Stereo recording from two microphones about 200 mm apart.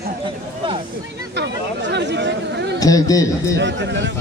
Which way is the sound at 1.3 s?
60° right (ahead or behind).